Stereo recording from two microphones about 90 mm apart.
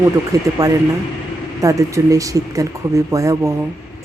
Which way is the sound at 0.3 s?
40° right (ahead or behind).